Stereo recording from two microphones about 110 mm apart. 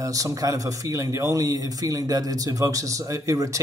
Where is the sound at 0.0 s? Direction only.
30° right (ahead or behind).